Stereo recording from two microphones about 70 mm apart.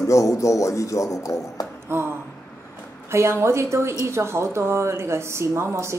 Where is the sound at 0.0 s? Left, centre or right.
Left.